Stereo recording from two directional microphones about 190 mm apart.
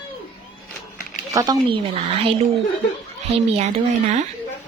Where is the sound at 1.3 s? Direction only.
20° right (ahead or behind).